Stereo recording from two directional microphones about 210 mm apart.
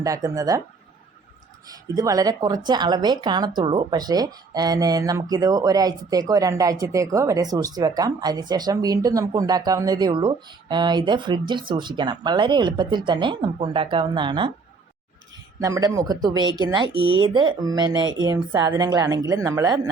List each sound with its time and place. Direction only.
0.0 s speech: 15° right (ahead or behind)
2.0 s a woman's voice: 15° right (ahead or behind)
15.6 s a woman's voice: 15° right (ahead or behind)